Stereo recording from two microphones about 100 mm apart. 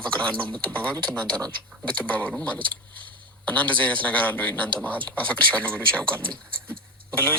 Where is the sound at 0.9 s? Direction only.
50° right (ahead or behind).